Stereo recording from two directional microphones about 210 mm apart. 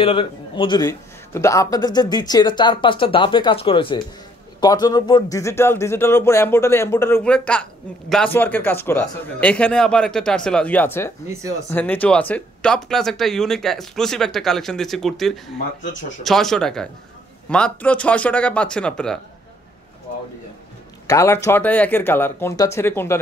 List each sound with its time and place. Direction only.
0.0 s a man's voice: 25° left (ahead or behind); by 19.1 s 5° left (ahead or behind)
21.1 s speech: 15° left (ahead or behind)